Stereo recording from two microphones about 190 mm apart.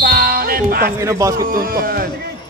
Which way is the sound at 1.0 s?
15° right (ahead or behind).